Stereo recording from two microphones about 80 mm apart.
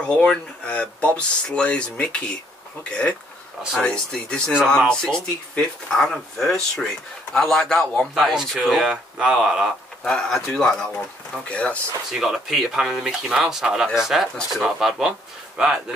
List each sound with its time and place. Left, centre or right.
0.0 s speech: centre
10.0 s speech: centre
12.1 s speech: centre